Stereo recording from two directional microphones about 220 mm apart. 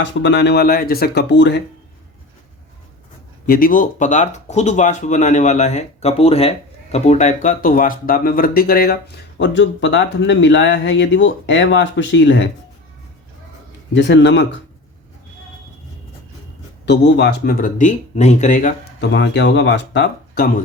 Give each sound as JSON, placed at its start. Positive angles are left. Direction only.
{"t": 0.0, "sound": "speech", "side_deg": 55}
{"t": 3.4, "sound": "speech", "side_deg": 40}
{"t": 13.9, "sound": "speech", "side_deg": 55}
{"t": 16.8, "sound": "speech", "side_deg": 50}
{"t": 18.9, "sound": "speech", "side_deg": 55}